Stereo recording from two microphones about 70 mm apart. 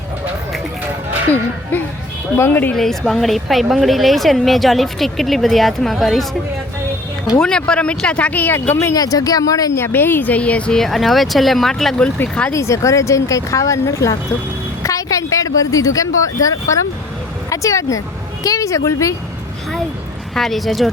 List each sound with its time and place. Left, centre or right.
1.7 s speech: left
2.7 s speech: centre
7.3 s speech: centre; by 9.0 s left
9.0 s speech: left
9.7 s speech: left; by 10.8 s centre
10.8 s speech: centre
12.5 s speech: left
20.3 s speech: centre